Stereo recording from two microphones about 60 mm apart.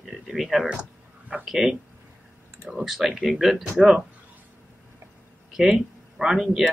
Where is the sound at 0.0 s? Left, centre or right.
Centre.